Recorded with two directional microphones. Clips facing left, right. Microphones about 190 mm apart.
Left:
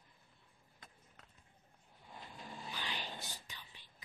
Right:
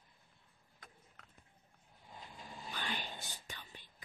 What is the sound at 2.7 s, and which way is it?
Whispering, 50° right (ahead or behind).